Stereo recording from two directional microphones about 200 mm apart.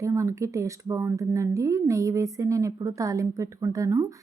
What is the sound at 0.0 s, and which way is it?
A woman's voice, 15° right (ahead or behind).